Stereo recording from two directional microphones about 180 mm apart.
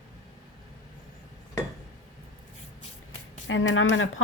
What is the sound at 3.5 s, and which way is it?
Speech, 90° left.